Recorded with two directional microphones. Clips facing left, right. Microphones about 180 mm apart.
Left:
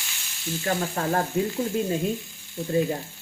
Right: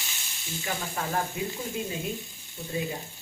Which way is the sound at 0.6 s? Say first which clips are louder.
Left 7 dB; 50° left (ahead or behind).